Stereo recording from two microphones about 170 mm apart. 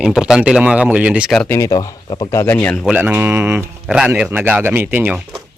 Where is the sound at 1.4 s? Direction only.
15° left (ahead or behind).